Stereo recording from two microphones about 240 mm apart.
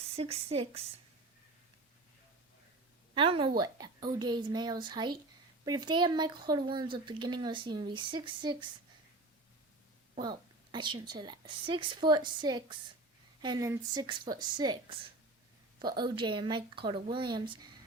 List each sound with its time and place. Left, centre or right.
0.2 s speech: right
3.2 s a woman's voice: right
10.2 s a woman's voice: centre